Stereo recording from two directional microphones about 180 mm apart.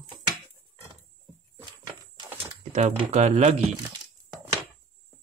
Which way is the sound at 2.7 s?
40° right (ahead or behind).